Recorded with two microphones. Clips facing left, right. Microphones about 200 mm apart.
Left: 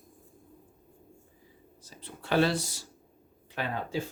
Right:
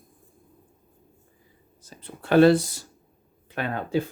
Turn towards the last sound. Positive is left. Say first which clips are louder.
# right 6 dB
turn(degrees=-60)  # may be behind; listen again after turning